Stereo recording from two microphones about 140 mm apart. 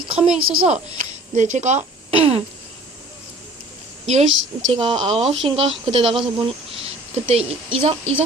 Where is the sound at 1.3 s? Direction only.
60° right (ahead or behind); by 2.4 s 40° right (ahead or behind).